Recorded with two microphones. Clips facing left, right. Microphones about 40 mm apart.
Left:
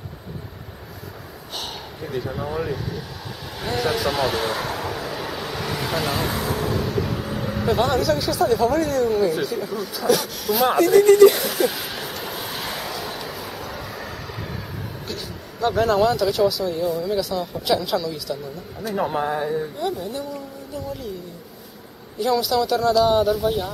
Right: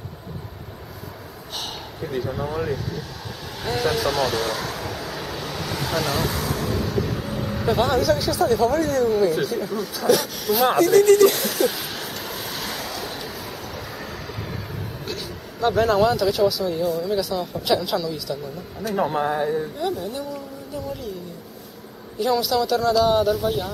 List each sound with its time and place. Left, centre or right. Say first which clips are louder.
1.6 s speech: right 1 dB; centre
4.1 s speech: even; centre
4.8 s vehicle: left 2 dB; centre
6.7 s vehicle: left 1 dB; centre
7.5 s speech: even; centre
10.9 s speech: left 3 dB; centre
12.2 s vehicle: left 1 dB; centre
12.9 s vehicle: left 1 dB; centre
15.0 s speech: right 1 dB; centre
22.2 s speech: left 1 dB; centre